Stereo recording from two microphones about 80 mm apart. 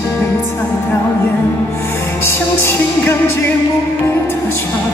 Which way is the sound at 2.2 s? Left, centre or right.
Left.